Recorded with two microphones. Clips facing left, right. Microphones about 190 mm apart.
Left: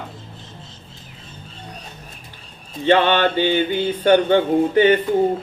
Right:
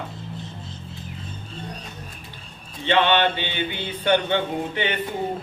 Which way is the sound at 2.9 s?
45° left (ahead or behind).